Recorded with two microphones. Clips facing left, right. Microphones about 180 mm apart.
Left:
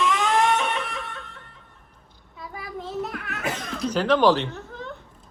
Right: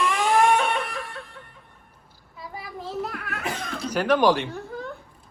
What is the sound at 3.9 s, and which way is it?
Speech, 10° right (ahead or behind).